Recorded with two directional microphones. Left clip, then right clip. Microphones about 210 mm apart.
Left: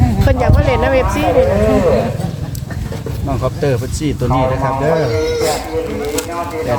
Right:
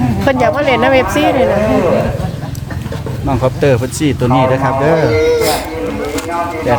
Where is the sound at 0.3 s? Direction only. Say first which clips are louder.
Right 5 dB; 20° right (ahead or behind).